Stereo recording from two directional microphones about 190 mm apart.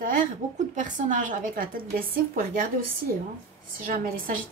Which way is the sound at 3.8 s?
45° right (ahead or behind).